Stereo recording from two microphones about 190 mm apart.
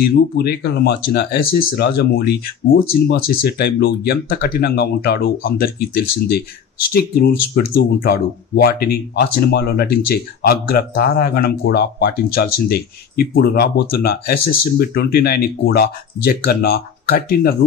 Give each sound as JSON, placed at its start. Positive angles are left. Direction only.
{"t": 0.0, "sound": "speech", "side_deg": 55}